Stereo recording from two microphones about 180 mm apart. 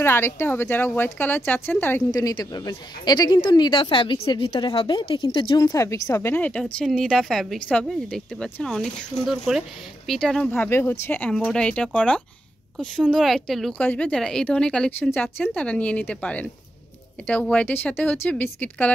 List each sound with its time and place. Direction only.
0.0 s a woman's voice: 15° left (ahead or behind)
2.0 s a woman's voice: 20° left (ahead or behind)